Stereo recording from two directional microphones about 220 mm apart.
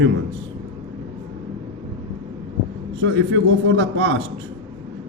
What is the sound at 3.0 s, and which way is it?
A man's voice, 60° right (ahead or behind).